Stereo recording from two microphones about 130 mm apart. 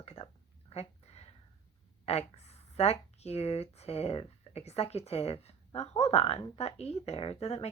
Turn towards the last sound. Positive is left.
turn(degrees=55)  # may be behind; listen again after turning